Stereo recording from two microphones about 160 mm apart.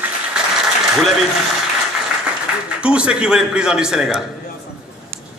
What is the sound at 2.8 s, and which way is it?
A man's voice, 5° right (ahead or behind).